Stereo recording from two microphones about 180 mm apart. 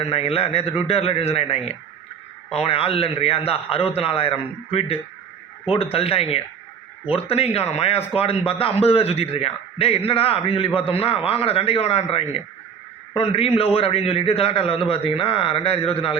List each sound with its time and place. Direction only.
0.0 s a man's voice: 35° left (ahead or behind)